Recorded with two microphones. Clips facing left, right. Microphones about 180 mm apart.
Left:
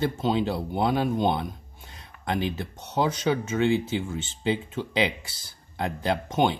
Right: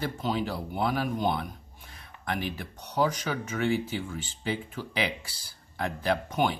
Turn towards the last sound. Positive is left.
turn(degrees=25)  # may be behind; listen again after turning